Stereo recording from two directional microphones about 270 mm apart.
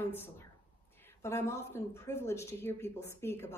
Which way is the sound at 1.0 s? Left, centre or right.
Centre.